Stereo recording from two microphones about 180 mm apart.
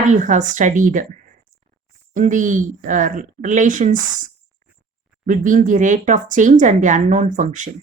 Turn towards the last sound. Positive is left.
turn(degrees=-45)  # may be behind; listen again after turning